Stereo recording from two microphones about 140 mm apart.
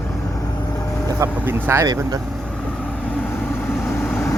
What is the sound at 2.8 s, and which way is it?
Vehicle, 10° left (ahead or behind).